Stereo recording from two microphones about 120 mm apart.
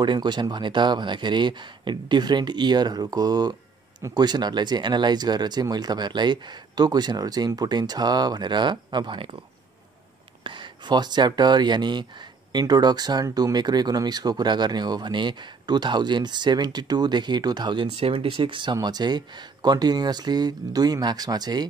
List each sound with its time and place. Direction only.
0.0 s speech: 40° right (ahead or behind)
10.4 s speech: 40° right (ahead or behind)
17.9 s speech: 50° right (ahead or behind); by 21.6 s 35° right (ahead or behind)